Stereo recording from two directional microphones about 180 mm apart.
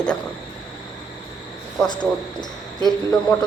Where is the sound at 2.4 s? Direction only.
25° left (ahead or behind).